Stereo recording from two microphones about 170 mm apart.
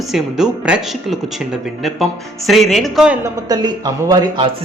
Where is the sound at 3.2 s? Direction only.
25° right (ahead or behind).